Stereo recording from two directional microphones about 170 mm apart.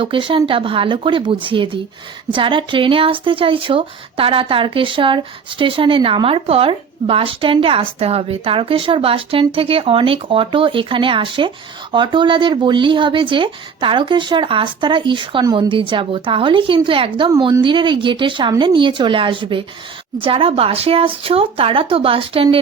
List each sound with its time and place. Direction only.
0.0 s speech: 30° right (ahead or behind)